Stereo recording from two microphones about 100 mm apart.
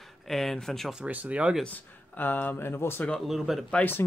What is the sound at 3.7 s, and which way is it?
Speech, 20° left (ahead or behind).